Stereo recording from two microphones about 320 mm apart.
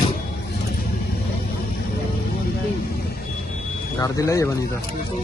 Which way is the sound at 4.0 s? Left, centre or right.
Centre.